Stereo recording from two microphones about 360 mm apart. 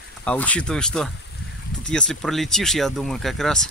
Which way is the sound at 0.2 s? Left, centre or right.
Centre.